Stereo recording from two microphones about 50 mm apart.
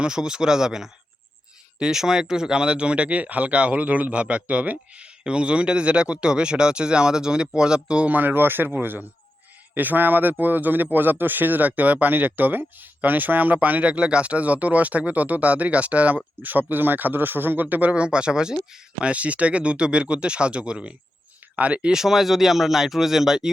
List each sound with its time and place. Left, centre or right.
0.0 s speech: centre
8.0 s speech: right; by 19.1 s centre
19.1 s speech: right
21.9 s speech: centre